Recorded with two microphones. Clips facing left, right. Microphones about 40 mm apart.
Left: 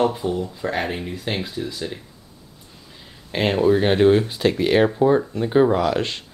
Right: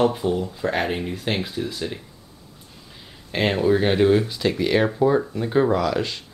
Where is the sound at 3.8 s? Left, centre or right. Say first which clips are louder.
Left 2 dB; centre.